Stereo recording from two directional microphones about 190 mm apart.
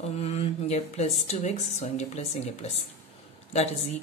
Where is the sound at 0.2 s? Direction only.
35° left (ahead or behind).